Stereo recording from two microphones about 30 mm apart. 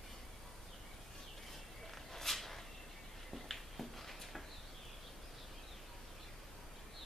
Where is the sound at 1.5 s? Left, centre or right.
Centre.